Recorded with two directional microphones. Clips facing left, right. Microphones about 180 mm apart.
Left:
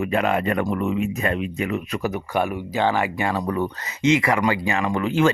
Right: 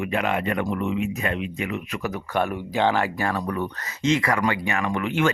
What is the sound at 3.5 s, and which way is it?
Speech, 30° left (ahead or behind).